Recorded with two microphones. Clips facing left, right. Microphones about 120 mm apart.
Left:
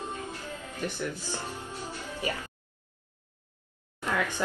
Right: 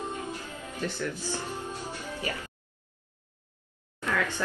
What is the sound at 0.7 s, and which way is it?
Speech, 15° left (ahead or behind).